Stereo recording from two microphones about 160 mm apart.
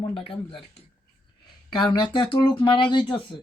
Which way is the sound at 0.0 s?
35° left (ahead or behind).